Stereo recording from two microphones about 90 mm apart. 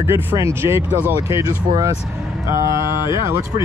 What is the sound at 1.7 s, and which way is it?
Speech, 45° right (ahead or behind).